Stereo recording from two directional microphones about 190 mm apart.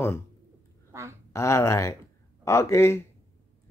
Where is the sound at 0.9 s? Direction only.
15° right (ahead or behind).